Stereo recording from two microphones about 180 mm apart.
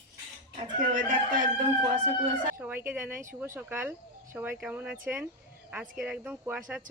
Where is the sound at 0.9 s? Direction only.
45° right (ahead or behind).